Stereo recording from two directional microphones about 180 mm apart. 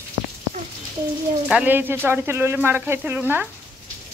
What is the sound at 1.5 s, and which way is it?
Speech, 5° right (ahead or behind).